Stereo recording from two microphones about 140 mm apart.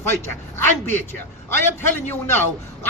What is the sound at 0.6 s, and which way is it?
A man's voice, 15° left (ahead or behind).